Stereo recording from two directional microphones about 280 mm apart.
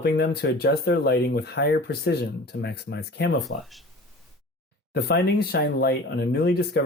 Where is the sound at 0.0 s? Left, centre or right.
Left.